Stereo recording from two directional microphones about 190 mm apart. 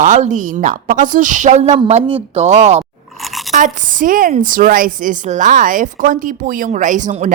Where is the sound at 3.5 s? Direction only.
40° right (ahead or behind).